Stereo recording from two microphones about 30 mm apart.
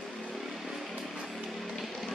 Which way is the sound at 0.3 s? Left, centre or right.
Centre.